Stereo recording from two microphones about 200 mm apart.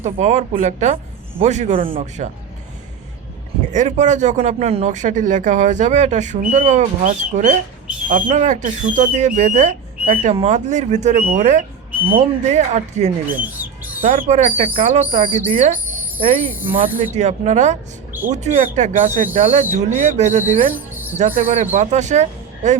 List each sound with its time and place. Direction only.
0.0 s speech: 35° right (ahead or behind)
3.7 s speech: 35° right (ahead or behind)
13.4 s rodents: 10° right (ahead or behind)
14.0 s speech: 40° right (ahead or behind)
16.5 s speech: 10° right (ahead or behind)
17.0 s speech: 35° right (ahead or behind)
20.4 s speech: 10° right (ahead or behind)
21.2 s speech: 40° right (ahead or behind)